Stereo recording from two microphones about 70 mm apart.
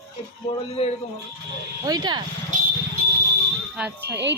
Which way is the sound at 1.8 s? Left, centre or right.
Right.